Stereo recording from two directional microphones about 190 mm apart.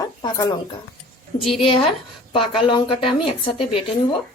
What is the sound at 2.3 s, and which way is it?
Speech, 25° left (ahead or behind).